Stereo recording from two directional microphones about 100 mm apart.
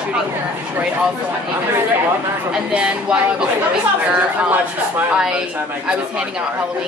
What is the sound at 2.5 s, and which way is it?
Speech, 10° right (ahead or behind).